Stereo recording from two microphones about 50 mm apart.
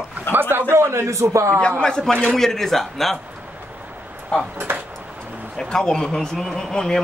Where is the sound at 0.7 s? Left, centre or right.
Right.